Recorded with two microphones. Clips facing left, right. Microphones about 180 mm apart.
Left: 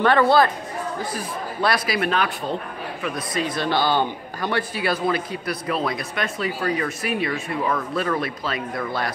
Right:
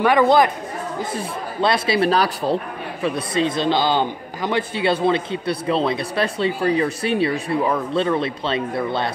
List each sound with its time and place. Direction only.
0.0 s speech: 15° right (ahead or behind)